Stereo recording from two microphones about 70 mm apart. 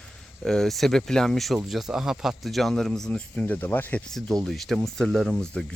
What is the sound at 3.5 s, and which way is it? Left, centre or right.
Speech, left.